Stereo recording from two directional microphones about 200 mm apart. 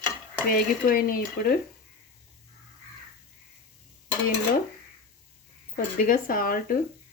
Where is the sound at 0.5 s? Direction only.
45° left (ahead or behind).